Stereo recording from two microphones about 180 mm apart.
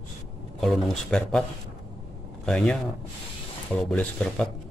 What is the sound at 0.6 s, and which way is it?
Speech, centre (ahead or behind).